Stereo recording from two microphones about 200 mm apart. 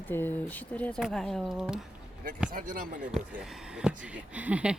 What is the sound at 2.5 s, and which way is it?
Speech, 40° right (ahead or behind).